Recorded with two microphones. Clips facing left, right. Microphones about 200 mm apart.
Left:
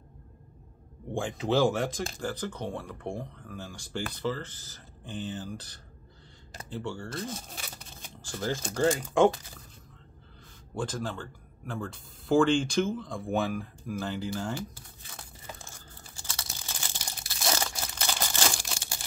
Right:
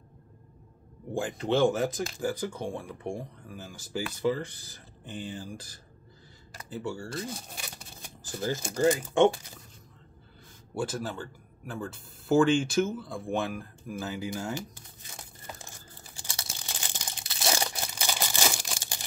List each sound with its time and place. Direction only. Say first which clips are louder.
1.1 s speech: even; 5° right (ahead or behind)
10.7 s speech: right 1 dB; 5° right (ahead or behind)
16.2 s crumpling: even; 15° right (ahead or behind)